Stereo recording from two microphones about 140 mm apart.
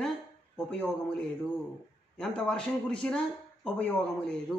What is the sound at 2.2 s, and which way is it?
A man's voice, 5° left (ahead or behind).